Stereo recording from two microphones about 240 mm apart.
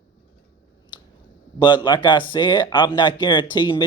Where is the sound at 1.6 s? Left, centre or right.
Centre.